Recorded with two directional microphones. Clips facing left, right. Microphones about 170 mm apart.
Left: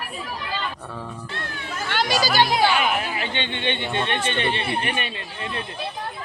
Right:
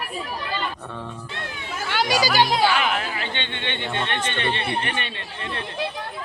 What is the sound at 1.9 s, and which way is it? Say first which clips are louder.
Speech: right 1 dB; 10° right (ahead or behind).